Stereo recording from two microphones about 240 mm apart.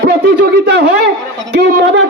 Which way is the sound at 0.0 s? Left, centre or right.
Right.